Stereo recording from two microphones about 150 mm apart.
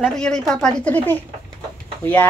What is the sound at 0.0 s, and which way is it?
Speech, 5° left (ahead or behind).